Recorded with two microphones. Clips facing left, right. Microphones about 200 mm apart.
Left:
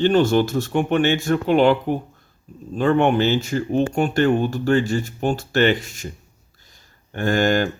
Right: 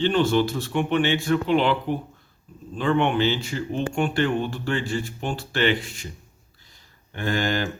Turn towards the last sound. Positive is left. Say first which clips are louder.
# left 6 dB
turn(degrees=45)  # may be behind; listen again after turning